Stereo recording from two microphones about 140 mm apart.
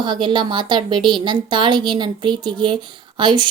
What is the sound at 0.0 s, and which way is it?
A woman's voice, 35° right (ahead or behind).